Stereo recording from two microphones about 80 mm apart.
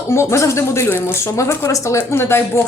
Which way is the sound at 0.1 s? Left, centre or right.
Left.